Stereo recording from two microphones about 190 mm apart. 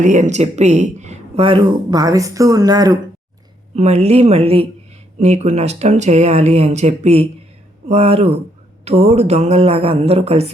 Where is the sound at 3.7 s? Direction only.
35° right (ahead or behind).